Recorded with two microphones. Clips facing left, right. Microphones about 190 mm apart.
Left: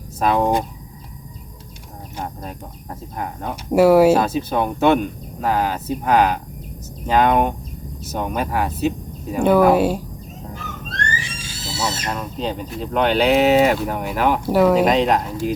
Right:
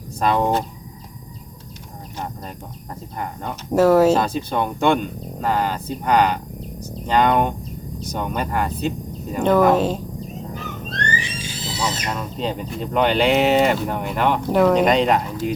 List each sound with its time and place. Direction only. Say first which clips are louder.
0.2 s speech: left 1 dB; 5° left (ahead or behind)
2.1 s speech: left 1 dB; 5° left (ahead or behind)
10.8 s a sound: right 1 dB; 20° right (ahead or behind)
12.1 s speech: even; centre (ahead or behind)